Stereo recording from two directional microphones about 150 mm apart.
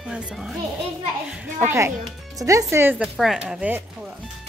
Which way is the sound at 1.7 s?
15° right (ahead or behind).